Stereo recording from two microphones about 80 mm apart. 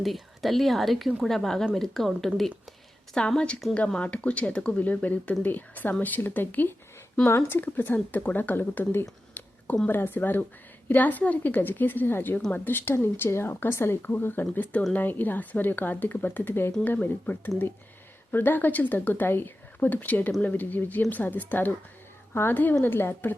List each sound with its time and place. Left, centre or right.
0.0 s a woman's voice: centre; by 23.3 s left